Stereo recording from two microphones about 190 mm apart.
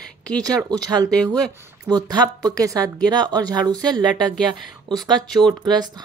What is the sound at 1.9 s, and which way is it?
A woman's voice, 20° right (ahead or behind).